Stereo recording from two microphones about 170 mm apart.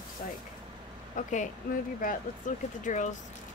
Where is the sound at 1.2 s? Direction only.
50° left (ahead or behind).